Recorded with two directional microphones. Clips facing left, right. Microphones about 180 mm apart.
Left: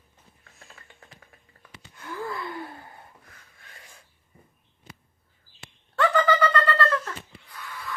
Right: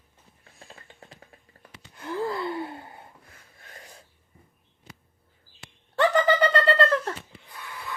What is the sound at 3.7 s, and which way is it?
Filing, 40° right (ahead or behind).